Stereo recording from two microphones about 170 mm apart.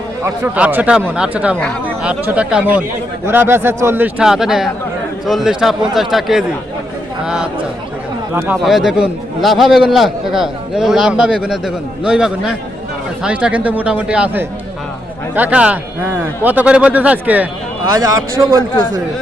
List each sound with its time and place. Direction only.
0.2 s a man's voice: 10° right (ahead or behind)
8.6 s a man's voice: centre (ahead or behind)
17.8 s a man's voice: 20° right (ahead or behind)